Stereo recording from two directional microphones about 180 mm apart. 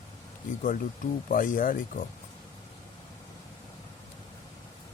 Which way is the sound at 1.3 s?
50° left (ahead or behind).